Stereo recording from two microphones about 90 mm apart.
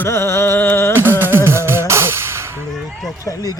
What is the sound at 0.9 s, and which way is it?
Music, 25° right (ahead or behind).